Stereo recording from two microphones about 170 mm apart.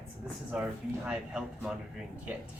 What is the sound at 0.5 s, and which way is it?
Speech, 5° right (ahead or behind).